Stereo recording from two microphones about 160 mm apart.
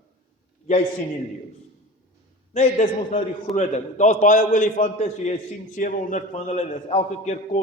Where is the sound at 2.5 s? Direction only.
50° left (ahead or behind).